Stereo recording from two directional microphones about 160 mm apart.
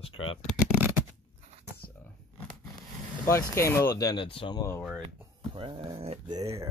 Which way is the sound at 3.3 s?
20° left (ahead or behind).